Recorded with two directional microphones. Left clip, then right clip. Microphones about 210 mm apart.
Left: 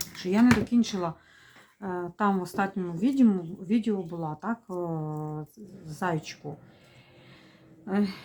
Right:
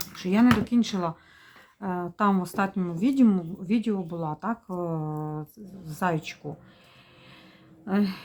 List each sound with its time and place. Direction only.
0.0 s a woman's voice: 20° right (ahead or behind)
7.9 s a woman's voice: 25° right (ahead or behind)